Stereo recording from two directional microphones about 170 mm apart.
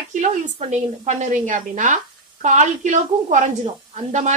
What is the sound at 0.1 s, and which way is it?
Speech, 45° right (ahead or behind).